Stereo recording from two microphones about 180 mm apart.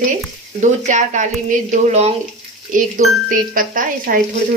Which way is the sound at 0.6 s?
45° right (ahead or behind).